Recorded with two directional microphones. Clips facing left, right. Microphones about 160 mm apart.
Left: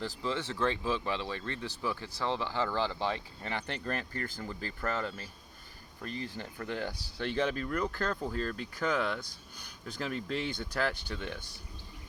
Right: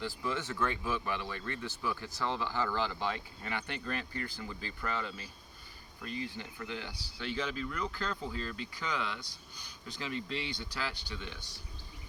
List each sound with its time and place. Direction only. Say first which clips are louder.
0.2 s speech: left 3 dB; 30° left (ahead or behind); by 11.4 s 50° left (ahead or behind)